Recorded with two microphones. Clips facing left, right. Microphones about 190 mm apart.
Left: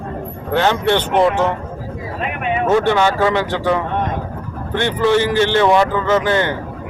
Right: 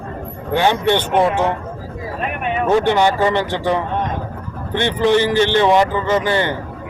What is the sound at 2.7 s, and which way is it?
Speech, 15° right (ahead or behind).